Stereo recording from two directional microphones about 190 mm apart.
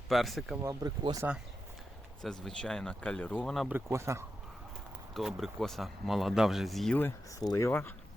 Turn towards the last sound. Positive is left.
turn(degrees=10)  # may be behind; listen again after turning